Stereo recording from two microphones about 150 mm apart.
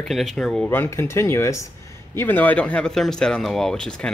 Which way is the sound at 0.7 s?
15° left (ahead or behind).